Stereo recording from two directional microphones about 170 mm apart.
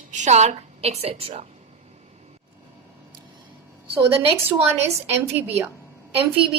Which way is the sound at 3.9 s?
15° right (ahead or behind).